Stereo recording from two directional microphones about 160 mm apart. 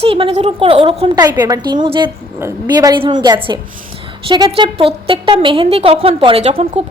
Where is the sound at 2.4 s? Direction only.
20° right (ahead or behind).